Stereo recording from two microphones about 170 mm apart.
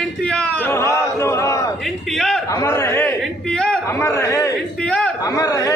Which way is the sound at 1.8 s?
Centre (ahead or behind).